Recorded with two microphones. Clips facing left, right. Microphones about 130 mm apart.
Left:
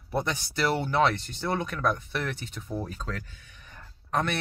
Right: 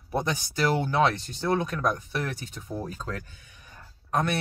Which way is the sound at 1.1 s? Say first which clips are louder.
Right 3 dB; 15° right (ahead or behind).